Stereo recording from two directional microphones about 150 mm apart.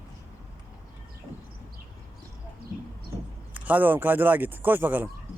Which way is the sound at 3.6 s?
10° right (ahead or behind).